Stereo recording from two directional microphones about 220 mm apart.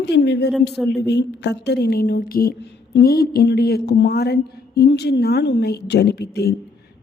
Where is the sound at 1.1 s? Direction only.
50° left (ahead or behind).